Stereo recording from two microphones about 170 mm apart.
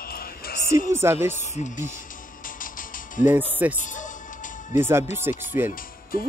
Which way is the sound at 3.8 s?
50° left (ahead or behind).